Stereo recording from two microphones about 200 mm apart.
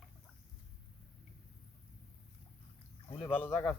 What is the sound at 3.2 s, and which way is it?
Speech, 10° left (ahead or behind).